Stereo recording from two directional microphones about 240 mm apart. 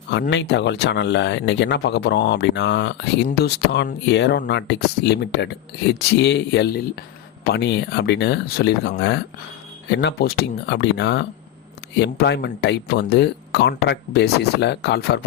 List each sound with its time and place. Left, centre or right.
0.1 s speech: left